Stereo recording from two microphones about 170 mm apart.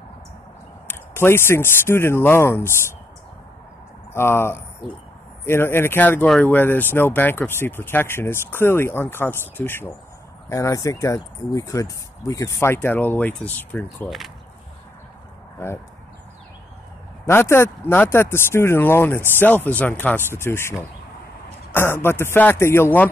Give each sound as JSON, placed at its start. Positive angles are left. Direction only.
{"t": 0.8, "sound": "speech", "side_deg": 15}
{"t": 4.1, "sound": "speech", "side_deg": 15}
{"t": 17.3, "sound": "speech", "side_deg": 15}